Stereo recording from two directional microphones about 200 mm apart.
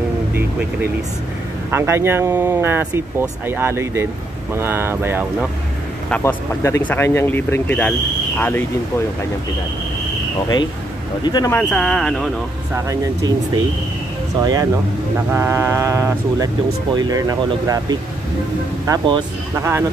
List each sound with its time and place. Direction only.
1.7 s speech: 15° right (ahead or behind)
6.0 s speech: 10° left (ahead or behind)
11.2 s speech: 20° left (ahead or behind)
11.7 s speech: 5° left (ahead or behind)
12.7 s speech: 15° right (ahead or behind)
14.4 s speech: 20° right (ahead or behind)